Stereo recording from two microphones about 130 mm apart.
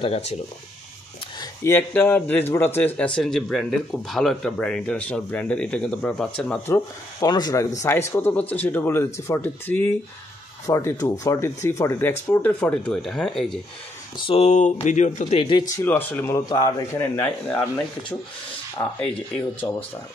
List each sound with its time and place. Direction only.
0.0 s speech: 50° left (ahead or behind)
1.6 s speech: 15° left (ahead or behind)
3.0 s speech: 5° left (ahead or behind)
6.7 s speech: 30° left (ahead or behind); by 13.6 s 5° left (ahead or behind)
14.1 s speech: 40° left (ahead or behind)
14.4 s speech: 60° left (ahead or behind)
15.3 s speech: 40° left (ahead or behind)
15.7 s speech: 15° left (ahead or behind)
16.3 s speech: 30° left (ahead or behind)
17.2 s speech: 10° left (ahead or behind)
18.9 s speech: 10° left (ahead or behind)
19.6 s speech: 25° left (ahead or behind)